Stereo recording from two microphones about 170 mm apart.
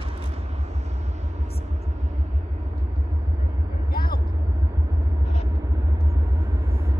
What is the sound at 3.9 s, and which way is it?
Vehicle, 60° left (ahead or behind).